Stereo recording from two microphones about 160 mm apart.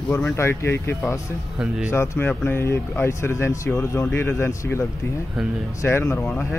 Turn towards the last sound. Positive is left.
turn(degrees=10)  # may be behind; listen again after turning